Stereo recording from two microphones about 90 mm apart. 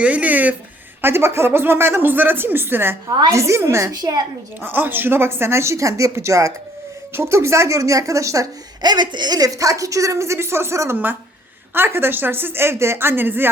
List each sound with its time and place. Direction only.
0.0 s a woman's voice: 15° right (ahead or behind)
3.9 s a woman's voice: 50° right (ahead or behind)
4.6 s a woman's voice: 20° right (ahead or behind)
8.8 s a woman's voice: 55° right (ahead or behind); by 13.5 s 25° right (ahead or behind)